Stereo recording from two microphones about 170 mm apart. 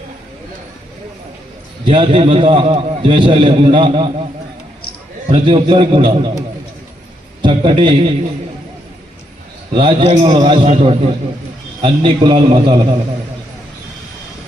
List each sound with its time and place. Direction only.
1.8 s a man's voice: 30° right (ahead or behind)
5.3 s a man's voice: 30° right (ahead or behind)
7.4 s a man's voice: 30° right (ahead or behind)
9.7 s a man's voice: 30° right (ahead or behind)